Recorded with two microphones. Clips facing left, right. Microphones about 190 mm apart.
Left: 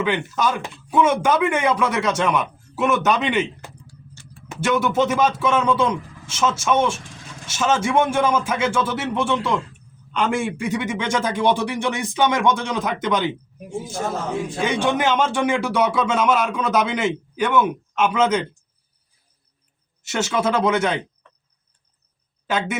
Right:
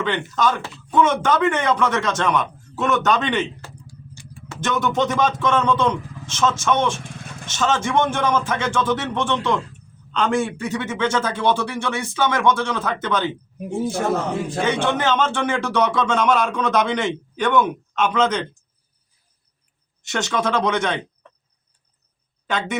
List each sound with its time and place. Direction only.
0.0 s a man's voice: 10° left (ahead or behind)
3.8 s vehicle: 15° right (ahead or behind)
4.4 s a man's voice: 10° left (ahead or behind)
13.7 s a man's voice: 65° right (ahead or behind)
14.6 s a man's voice: 10° left (ahead or behind)
20.0 s a man's voice: 5° left (ahead or behind)
22.4 s speech: 5° left (ahead or behind)